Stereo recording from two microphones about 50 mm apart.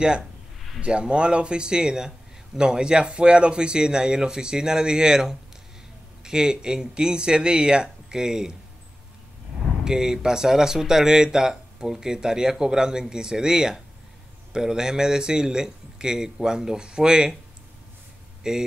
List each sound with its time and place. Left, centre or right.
0.7 s a man's voice: right
9.8 s a man's voice: centre
18.4 s a man's voice: centre